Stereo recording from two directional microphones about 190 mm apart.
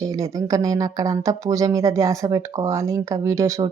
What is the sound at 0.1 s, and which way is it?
Speech, 15° right (ahead or behind).